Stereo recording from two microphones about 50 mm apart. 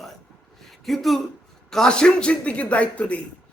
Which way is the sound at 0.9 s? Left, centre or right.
Centre.